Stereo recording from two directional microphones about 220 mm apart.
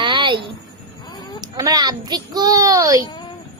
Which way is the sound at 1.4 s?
15° right (ahead or behind).